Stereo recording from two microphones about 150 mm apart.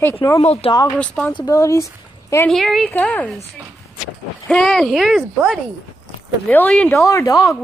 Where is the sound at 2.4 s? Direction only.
Centre (ahead or behind).